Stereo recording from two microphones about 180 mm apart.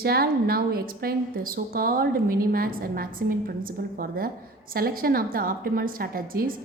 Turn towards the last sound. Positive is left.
turn(degrees=-55)  # may be behind; listen again after turning